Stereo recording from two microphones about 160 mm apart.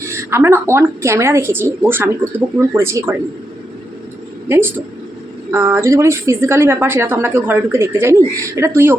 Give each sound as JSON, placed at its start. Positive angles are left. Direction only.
{"t": 0.1, "sound": "a woman's voice", "side_deg": -15}
{"t": 4.4, "sound": "a woman's voice", "side_deg": -15}